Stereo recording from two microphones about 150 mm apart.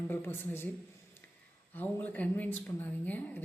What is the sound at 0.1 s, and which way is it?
Speech, 15° left (ahead or behind).